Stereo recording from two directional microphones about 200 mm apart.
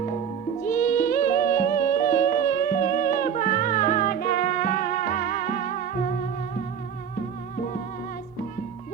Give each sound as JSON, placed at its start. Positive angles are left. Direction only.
{"t": 0.6, "sound": "music", "side_deg": 40}